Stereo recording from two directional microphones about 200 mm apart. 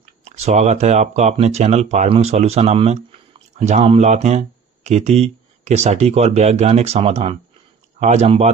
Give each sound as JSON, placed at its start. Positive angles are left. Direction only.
{"t": 0.3, "sound": "speech", "side_deg": -35}